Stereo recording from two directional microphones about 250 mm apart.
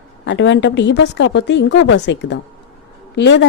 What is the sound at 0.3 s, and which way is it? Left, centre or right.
Speech, left.